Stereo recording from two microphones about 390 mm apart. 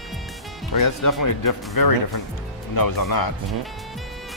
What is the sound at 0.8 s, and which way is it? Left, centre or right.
Speech, left.